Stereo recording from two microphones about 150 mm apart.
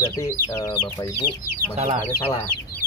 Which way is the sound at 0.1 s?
20° left (ahead or behind).